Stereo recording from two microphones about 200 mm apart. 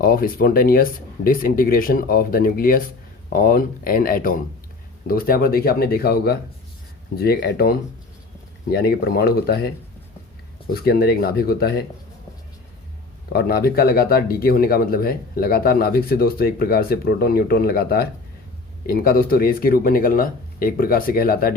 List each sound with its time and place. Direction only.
0.0 s speech: 45° left (ahead or behind)
13.3 s speech: 50° left (ahead or behind)